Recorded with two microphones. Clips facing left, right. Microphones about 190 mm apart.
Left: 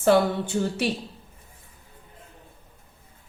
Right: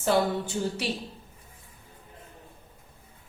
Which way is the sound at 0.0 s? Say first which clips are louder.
Left 5 dB; 60° left (ahead or behind).